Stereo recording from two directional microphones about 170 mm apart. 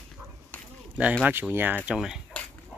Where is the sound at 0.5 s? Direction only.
10° left (ahead or behind).